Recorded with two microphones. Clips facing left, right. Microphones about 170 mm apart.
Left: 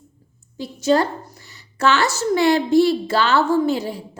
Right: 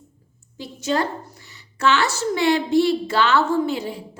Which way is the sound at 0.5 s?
35° left (ahead or behind).